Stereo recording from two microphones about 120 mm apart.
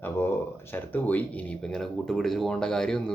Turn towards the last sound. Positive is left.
turn(degrees=5)  # may be behind; listen again after turning